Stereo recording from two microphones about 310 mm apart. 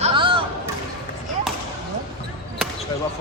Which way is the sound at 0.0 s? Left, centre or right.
Centre.